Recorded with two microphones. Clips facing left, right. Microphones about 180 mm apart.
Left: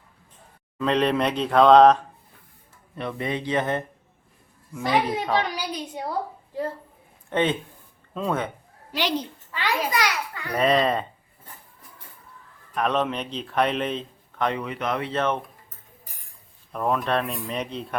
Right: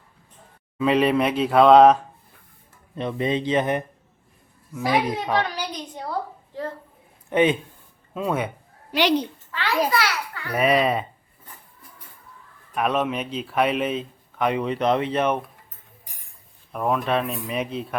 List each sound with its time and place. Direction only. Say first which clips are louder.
0.8 s speech: right 3 dB; 5° right (ahead or behind)
2.9 s speech: right 4 dB; 20° right (ahead or behind)
4.7 s speech: right 1 dB; 5° right (ahead or behind)
5.5 s a sound: left 1 dB; 10° left (ahead or behind)
7.3 s a man's voice: right 4 dB; 10° right (ahead or behind)
8.9 s a woman's voice: right 6 dB; 65° right (ahead or behind)
9.5 s a child's voice: right 3 dB; 15° left (ahead or behind)
10.5 s a man's voice: right 1 dB; 10° right (ahead or behind)
12.7 s a man's voice: right 1 dB; 10° right (ahead or behind)
14.6 s speech: right 6 dB; 30° right (ahead or behind); by 15.4 s 15° right (ahead or behind)
16.7 s speech: right 1 dB; 5° right (ahead or behind)